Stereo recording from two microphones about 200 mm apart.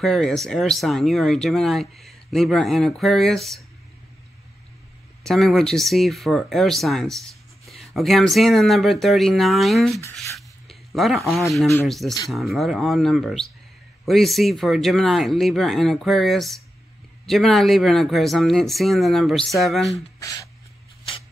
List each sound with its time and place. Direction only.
0.0 s speech: centre (ahead or behind)
5.2 s speech: centre (ahead or behind)
10.1 s rub: centre (ahead or behind)
12.3 s speech: centre (ahead or behind)
20.2 s speech: 15° left (ahead or behind)